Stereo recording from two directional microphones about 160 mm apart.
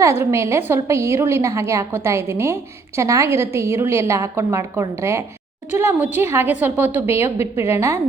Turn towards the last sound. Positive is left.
turn(degrees=-15)  # may be behind; listen again after turning